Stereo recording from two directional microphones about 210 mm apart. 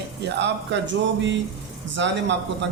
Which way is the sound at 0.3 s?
55° right (ahead or behind).